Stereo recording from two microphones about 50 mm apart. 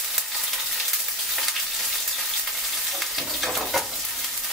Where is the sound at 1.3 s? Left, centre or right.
Centre.